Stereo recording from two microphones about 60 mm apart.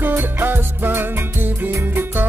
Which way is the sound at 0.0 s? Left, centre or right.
Right.